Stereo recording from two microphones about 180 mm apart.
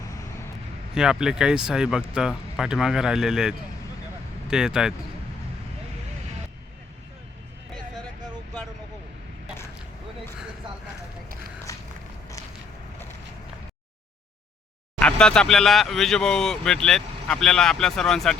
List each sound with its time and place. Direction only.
0.9 s speech: 5° right (ahead or behind)
11.7 s walk: 15° left (ahead or behind)
14.9 s speech: 5° left (ahead or behind)